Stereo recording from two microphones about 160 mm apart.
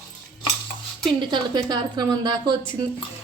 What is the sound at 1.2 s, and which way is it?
A woman's voice, 30° right (ahead or behind).